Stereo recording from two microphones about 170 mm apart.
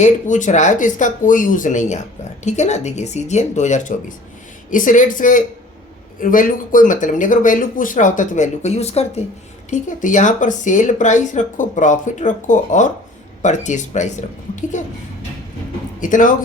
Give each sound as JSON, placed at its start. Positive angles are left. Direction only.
{"t": 0.0, "sound": "speech", "side_deg": 45}
{"t": 16.0, "sound": "speech", "side_deg": 50}